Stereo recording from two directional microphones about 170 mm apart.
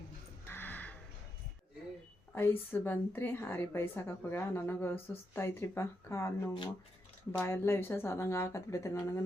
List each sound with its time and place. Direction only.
0.4 s music: 10° left (ahead or behind)
2.3 s a woman's voice: 15° left (ahead or behind)
7.3 s a woman's voice: 15° left (ahead or behind)